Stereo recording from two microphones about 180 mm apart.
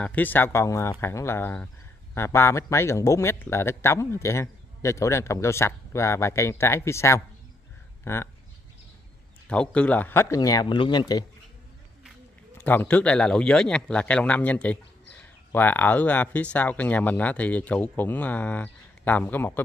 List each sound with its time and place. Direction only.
0.0 s speech: 10° left (ahead or behind)
9.5 s speech: 5° left (ahead or behind); by 11.2 s 25° left (ahead or behind)
12.5 s speech: 10° left (ahead or behind)